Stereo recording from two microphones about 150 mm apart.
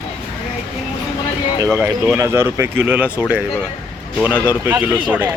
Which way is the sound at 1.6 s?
20° right (ahead or behind).